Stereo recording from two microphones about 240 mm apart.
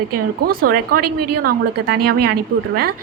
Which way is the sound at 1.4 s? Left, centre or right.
Right.